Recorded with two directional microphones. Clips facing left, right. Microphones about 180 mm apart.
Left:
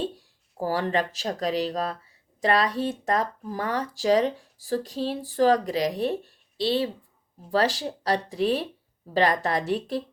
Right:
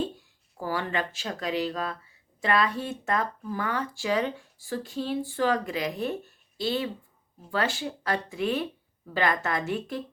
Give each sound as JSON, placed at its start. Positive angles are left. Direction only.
{"t": 0.0, "sound": "speech", "side_deg": 35}